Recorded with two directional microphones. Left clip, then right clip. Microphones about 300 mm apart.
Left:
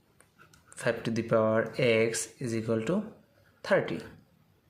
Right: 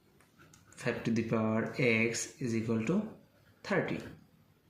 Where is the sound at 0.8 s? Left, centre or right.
Left.